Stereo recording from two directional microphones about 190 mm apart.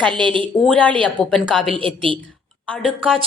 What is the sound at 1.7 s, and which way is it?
Speech, 25° right (ahead or behind).